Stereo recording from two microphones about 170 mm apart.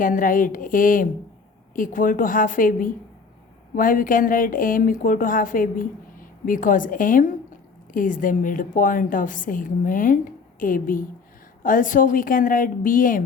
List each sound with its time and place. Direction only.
0.0 s a woman's voice: 50° left (ahead or behind)